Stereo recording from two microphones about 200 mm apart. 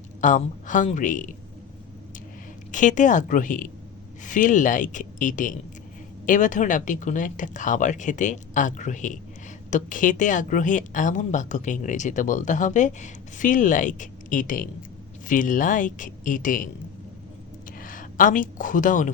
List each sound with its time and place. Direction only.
0.2 s speech: 40° left (ahead or behind)
2.7 s speech: 40° left (ahead or behind)
17.7 s speech: 40° left (ahead or behind)